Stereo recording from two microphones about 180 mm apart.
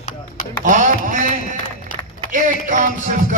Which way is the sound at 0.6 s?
45° right (ahead or behind).